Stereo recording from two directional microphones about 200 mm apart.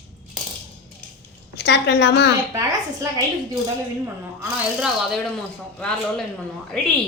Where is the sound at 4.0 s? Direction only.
5° right (ahead or behind).